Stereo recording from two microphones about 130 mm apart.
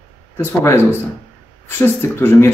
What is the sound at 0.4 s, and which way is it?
A man's voice, 20° left (ahead or behind).